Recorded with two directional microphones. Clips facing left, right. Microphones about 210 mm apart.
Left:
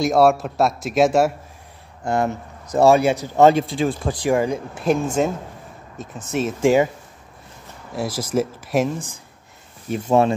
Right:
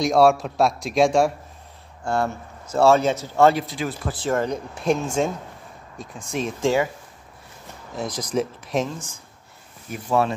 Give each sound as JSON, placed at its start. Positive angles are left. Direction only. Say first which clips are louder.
{"t": 0.0, "sound": "a man's voice", "louder": "left 1 dB", "side_deg": 0}
{"t": 2.0, "sound": "a man's voice", "louder": "left 3 dB", "side_deg": 20}
{"t": 4.2, "sound": "a man's voice", "louder": "left 3 dB", "side_deg": 10}
{"t": 7.9, "sound": "speech", "louder": "left 3 dB", "side_deg": 5}
{"t": 9.8, "sound": "a man's voice", "louder": "left 5 dB", "side_deg": 25}